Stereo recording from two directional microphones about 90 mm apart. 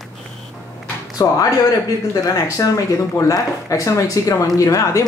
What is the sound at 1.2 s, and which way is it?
Speech, 40° left (ahead or behind).